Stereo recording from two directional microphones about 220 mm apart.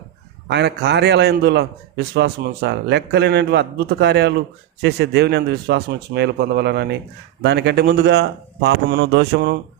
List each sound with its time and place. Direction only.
0.4 s a man's voice: 50° right (ahead or behind)